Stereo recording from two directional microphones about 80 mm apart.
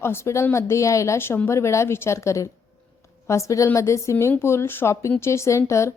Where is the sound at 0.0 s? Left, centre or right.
Left.